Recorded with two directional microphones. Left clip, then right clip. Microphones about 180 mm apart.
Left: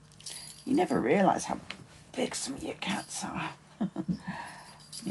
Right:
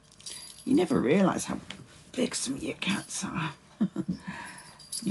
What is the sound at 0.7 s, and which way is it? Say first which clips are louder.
Speech: right 2 dB; 35° left (ahead or behind).